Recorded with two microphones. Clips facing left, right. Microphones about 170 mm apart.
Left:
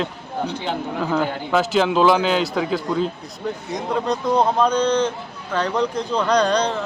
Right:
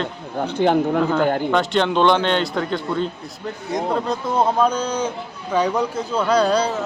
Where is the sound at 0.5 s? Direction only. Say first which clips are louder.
Right 9 dB; 55° right (ahead or behind).